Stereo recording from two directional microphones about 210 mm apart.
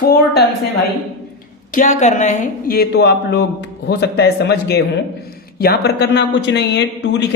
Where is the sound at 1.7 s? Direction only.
35° left (ahead or behind).